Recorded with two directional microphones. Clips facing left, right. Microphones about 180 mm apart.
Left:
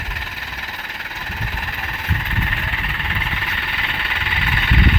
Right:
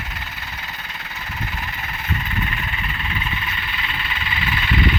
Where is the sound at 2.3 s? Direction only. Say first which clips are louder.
Even; 65° left (ahead or behind).